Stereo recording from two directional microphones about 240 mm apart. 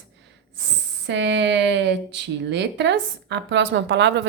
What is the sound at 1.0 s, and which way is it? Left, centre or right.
Speech, right.